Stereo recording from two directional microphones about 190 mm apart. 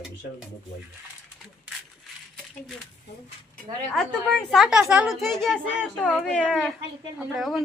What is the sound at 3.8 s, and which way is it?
A woman's voice, 5° left (ahead or behind).